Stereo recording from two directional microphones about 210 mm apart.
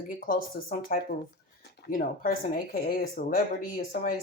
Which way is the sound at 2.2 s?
45° left (ahead or behind).